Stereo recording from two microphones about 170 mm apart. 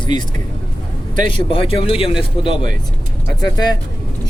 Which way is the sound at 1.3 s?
30° left (ahead or behind).